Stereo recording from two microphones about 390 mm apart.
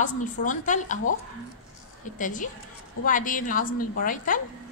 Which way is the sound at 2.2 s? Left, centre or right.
Centre.